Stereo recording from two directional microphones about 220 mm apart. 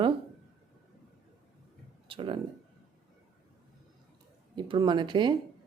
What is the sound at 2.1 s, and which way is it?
Speech, 25° right (ahead or behind).